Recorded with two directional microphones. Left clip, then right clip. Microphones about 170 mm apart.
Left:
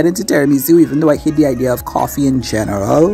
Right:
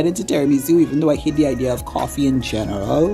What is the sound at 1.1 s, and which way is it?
Speech, 15° left (ahead or behind).